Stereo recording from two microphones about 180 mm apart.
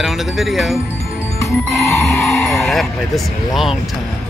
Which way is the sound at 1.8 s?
15° left (ahead or behind).